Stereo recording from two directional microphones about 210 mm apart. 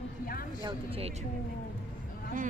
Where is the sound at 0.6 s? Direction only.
25° right (ahead or behind).